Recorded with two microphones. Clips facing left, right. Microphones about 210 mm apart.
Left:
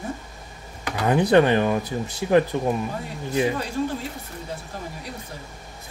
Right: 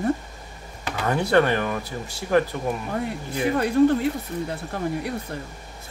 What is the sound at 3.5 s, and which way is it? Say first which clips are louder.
Speech: right 8 dB; 60° right (ahead or behind).